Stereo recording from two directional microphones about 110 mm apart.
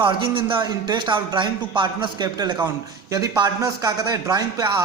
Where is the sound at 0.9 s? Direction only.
45° right (ahead or behind).